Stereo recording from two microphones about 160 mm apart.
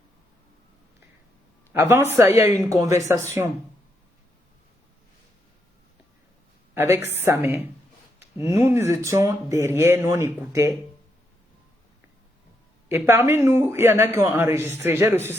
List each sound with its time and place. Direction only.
1.7 s a man's voice: 15° right (ahead or behind)
6.7 s a man's voice: 15° right (ahead or behind)
12.9 s a man's voice: 15° right (ahead or behind)